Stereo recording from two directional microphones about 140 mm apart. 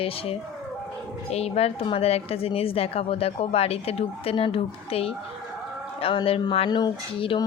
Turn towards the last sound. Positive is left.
turn(degrees=40)  # may be behind; listen again after turning